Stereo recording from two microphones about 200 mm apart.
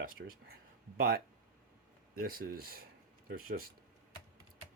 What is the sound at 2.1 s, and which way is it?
Speech, 45° right (ahead or behind).